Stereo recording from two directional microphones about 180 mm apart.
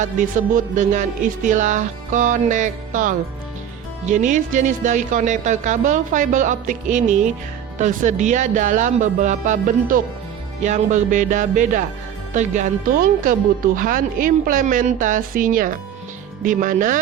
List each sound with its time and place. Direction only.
0.0 s speech: 45° right (ahead or behind)